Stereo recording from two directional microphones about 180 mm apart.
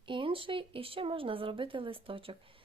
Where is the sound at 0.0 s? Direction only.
30° right (ahead or behind).